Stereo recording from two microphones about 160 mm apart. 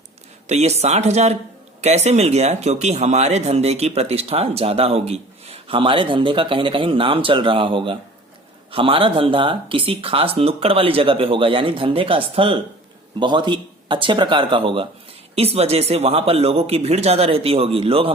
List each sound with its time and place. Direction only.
0.4 s speech: 45° right (ahead or behind)